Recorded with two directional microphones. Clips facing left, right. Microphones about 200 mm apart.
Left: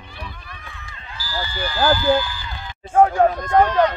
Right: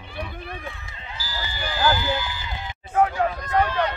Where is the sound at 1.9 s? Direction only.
20° right (ahead or behind).